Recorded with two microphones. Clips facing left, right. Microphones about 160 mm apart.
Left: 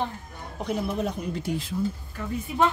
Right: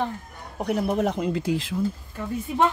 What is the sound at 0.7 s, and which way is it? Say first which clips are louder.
Speech: right 4 dB; 65° right (ahead or behind).